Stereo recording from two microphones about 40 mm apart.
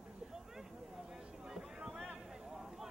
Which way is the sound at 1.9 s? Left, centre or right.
Centre.